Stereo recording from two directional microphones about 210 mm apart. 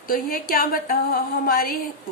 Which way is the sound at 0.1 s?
45° left (ahead or behind).